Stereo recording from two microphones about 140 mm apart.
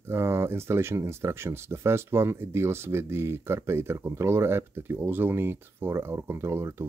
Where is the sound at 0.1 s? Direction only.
20° right (ahead or behind).